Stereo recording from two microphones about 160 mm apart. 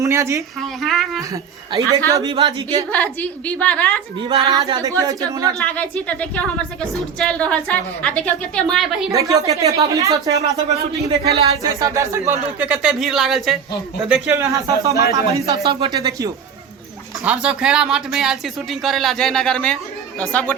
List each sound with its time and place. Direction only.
0.0 s a woman's voice: 20° right (ahead or behind)
0.6 s speech: centre (ahead or behind)
1.3 s speech: 20° right (ahead or behind)
2.3 s speech: 35° right (ahead or behind)
2.9 s a woman's voice: 10° left (ahead or behind)
4.5 s speech: 20° right (ahead or behind)
5.5 s a woman's voice: 10° left (ahead or behind)
9.1 s speech: 20° right (ahead or behind)
11.1 s speech: 40° right (ahead or behind)
11.6 s speech: 20° right (ahead or behind)
12.5 s speech: 10° right (ahead or behind)
14.1 s speech: 15° right (ahead or behind)
17.2 s speech: 5° right (ahead or behind)